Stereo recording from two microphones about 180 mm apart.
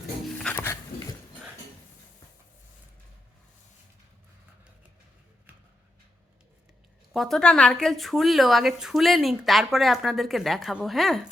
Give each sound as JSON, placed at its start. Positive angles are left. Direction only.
{"t": 0.3, "sound": "dog", "side_deg": 5}
{"t": 7.1, "sound": "a woman's voice", "side_deg": 0}